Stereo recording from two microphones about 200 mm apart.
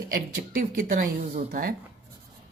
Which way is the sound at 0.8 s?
40° right (ahead or behind).